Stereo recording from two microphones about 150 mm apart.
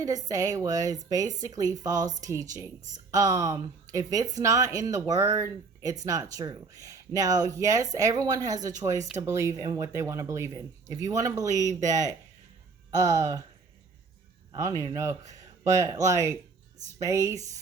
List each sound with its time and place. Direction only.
0.0 s speech: 25° right (ahead or behind)
14.5 s speech: 20° right (ahead or behind)